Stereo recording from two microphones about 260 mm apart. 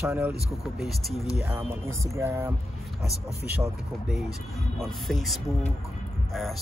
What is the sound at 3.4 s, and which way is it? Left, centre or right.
Speech, centre.